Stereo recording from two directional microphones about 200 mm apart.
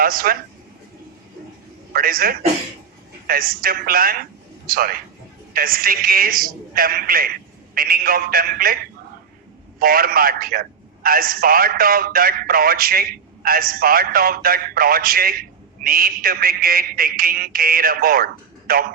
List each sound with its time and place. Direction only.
0.0 s a man's voice: 45° right (ahead or behind)
1.9 s a man's voice: 45° right (ahead or behind)
9.8 s a man's voice: 45° right (ahead or behind)